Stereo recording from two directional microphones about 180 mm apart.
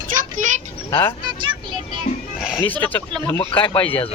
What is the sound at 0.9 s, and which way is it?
Speech, 25° left (ahead or behind).